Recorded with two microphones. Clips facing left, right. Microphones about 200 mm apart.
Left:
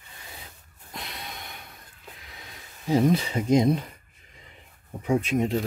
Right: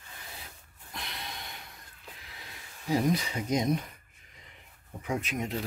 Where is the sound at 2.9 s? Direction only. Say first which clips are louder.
Left 6 dB; 25° left (ahead or behind).